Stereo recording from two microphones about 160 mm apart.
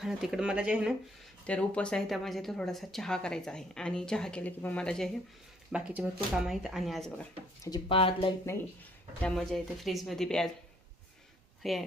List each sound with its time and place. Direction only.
0.0 s speech: 5° right (ahead or behind)
1.5 s speech: 5° left (ahead or behind)
5.7 s speech: 5° right (ahead or behind)
7.9 s speech: 35° left (ahead or behind)
9.2 s speech: 5° left (ahead or behind)
11.6 s speech: centre (ahead or behind)